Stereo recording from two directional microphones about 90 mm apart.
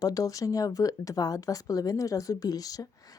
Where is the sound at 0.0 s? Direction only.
40° left (ahead or behind).